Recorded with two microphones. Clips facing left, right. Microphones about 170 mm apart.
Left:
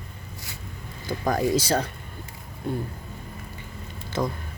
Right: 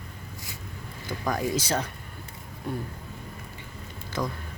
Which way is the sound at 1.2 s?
35° left (ahead or behind).